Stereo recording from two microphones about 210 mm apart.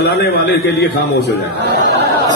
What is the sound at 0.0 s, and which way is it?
Speech, 55° left (ahead or behind).